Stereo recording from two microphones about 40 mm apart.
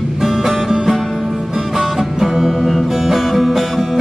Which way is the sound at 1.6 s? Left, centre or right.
Centre.